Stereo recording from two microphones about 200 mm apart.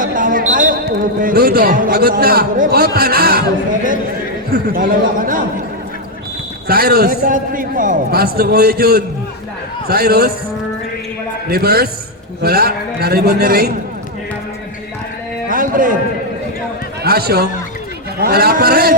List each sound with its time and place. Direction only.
0.0 s a sound: 40° right (ahead or behind)
1.2 s a man's voice: 45° right (ahead or behind)
4.5 s a man's voice: 45° right (ahead or behind)
6.7 s a man's voice: 50° right (ahead or behind)
11.4 s a man's voice: 50° right (ahead or behind)
15.4 s a sound: 45° right (ahead or behind)
17.0 s a man's voice: 50° right (ahead or behind)